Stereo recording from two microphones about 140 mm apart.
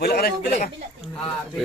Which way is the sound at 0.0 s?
90° left.